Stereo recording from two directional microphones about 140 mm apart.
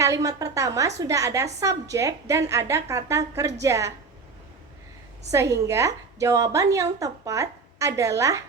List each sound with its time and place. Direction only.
0.0 s a woman's voice: 25° right (ahead or behind)
5.3 s a woman's voice: 20° right (ahead or behind)